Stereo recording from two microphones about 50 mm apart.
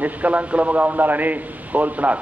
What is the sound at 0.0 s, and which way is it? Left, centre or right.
A man's voice, right.